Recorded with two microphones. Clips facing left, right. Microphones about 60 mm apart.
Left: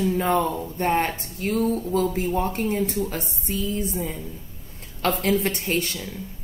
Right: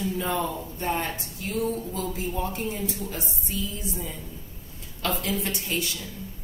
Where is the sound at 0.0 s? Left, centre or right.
Left.